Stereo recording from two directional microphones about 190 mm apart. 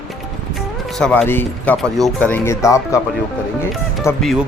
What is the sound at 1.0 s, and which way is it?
Speech, 5° left (ahead or behind).